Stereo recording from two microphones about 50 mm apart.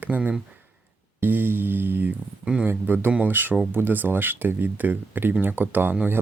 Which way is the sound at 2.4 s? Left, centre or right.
Right.